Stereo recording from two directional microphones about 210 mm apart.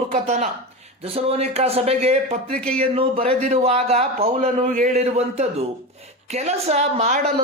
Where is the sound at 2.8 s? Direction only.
30° right (ahead or behind).